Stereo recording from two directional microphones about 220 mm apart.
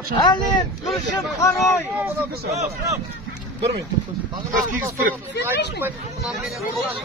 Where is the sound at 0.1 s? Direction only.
20° left (ahead or behind).